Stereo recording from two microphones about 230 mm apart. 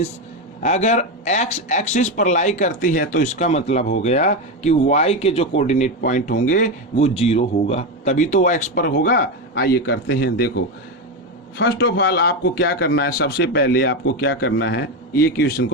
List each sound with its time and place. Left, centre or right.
0.6 s a man's voice: left